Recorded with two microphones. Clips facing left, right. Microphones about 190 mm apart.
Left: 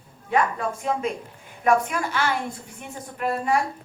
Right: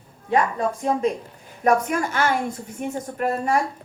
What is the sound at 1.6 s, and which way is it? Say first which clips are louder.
A woman's voice: right 2 dB; 45° right (ahead or behind).